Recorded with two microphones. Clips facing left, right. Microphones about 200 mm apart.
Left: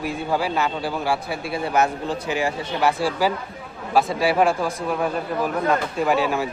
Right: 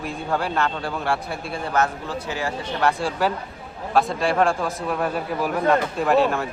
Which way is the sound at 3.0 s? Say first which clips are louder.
Left 2 dB; 5° left (ahead or behind).